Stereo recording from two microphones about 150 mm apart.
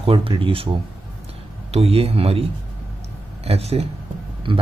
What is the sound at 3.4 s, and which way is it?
Speech, 45° right (ahead or behind).